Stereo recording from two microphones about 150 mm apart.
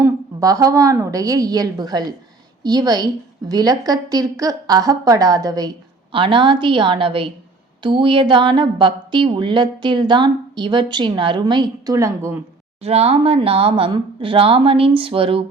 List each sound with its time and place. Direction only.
0.0 s a woman's voice: 20° right (ahead or behind)
12.8 s a woman's voice: 45° right (ahead or behind)